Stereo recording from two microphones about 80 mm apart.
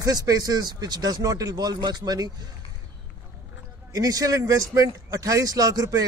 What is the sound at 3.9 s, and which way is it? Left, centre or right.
Speech, right.